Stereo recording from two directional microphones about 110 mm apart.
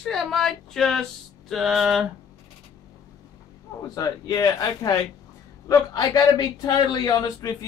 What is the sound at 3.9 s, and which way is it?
A man's voice, 35° left (ahead or behind).